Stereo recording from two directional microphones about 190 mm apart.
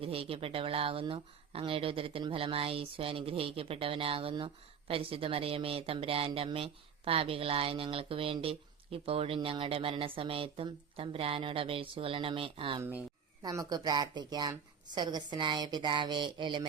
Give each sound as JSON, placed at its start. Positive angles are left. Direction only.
{"t": 0.0, "sound": "speech", "side_deg": -30}
{"t": 12.8, "sound": "speech", "side_deg": -10}
{"t": 13.4, "sound": "speech", "side_deg": -20}